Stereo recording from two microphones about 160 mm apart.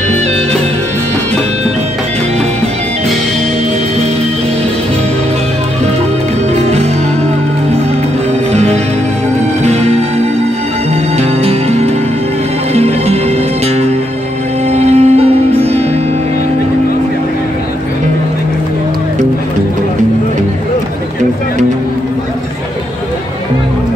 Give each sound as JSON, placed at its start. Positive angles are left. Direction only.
{"t": 9.6, "sound": "music", "side_deg": -45}
{"t": 11.1, "sound": "music", "side_deg": -40}
{"t": 14.7, "sound": "music", "side_deg": -45}